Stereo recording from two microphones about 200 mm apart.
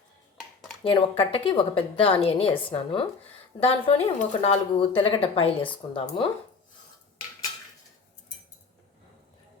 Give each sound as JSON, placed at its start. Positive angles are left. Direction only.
{"t": 0.9, "sound": "speech", "side_deg": 25}